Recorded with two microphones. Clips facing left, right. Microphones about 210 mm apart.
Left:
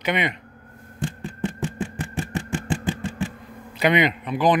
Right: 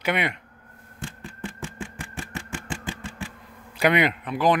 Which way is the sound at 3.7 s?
10° right (ahead or behind).